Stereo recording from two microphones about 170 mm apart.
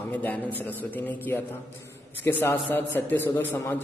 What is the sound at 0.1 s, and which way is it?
A man's voice, 10° left (ahead or behind).